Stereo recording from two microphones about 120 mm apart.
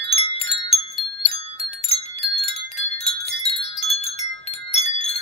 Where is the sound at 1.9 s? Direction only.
60° left (ahead or behind).